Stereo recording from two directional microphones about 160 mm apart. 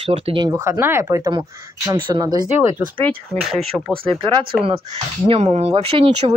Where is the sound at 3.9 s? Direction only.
35° right (ahead or behind).